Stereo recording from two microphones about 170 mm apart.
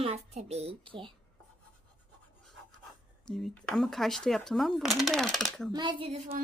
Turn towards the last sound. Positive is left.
turn(degrees=-35)  # may be behind; listen again after turning